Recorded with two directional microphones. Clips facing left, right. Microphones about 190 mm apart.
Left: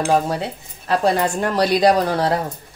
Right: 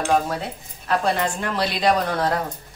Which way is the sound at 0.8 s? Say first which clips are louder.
Left 4 dB; 35° left (ahead or behind).